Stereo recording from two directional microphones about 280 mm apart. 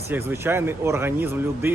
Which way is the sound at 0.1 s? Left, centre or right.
Centre.